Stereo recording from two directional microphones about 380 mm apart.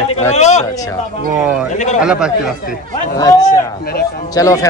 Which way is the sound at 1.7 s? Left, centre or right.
Centre.